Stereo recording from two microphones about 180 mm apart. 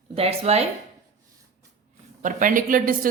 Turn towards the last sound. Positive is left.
turn(degrees=-50)  # may be behind; listen again after turning